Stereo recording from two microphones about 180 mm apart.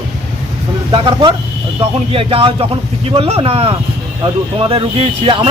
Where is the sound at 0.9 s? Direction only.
25° right (ahead or behind).